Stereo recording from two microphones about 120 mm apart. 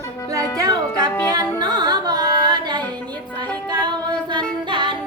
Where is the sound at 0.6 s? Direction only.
30° right (ahead or behind).